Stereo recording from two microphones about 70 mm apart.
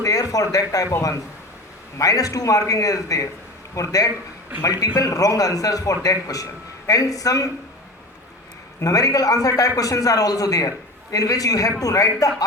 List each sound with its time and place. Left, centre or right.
0.0 s a man's voice: left
2.0 s a man's voice: left
8.8 s a man's voice: left